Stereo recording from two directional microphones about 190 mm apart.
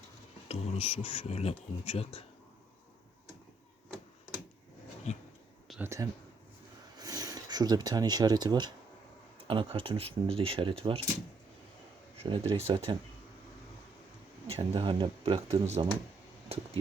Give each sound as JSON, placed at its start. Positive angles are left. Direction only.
{"t": 0.4, "sound": "a sound", "side_deg": 30}
{"t": 1.0, "sound": "speech", "side_deg": 30}
{"t": 5.1, "sound": "a sound", "side_deg": 40}
{"t": 5.8, "sound": "speech", "side_deg": -15}
{"t": 12.1, "sound": "speech", "side_deg": -30}
{"t": 14.4, "sound": "speech", "side_deg": -30}